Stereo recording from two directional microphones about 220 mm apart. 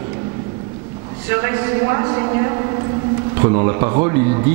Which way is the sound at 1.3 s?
15° right (ahead or behind).